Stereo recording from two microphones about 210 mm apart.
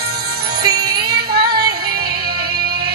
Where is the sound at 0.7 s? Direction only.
50° right (ahead or behind).